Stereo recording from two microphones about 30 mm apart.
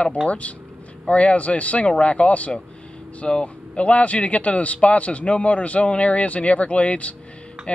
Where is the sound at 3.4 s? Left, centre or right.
Left.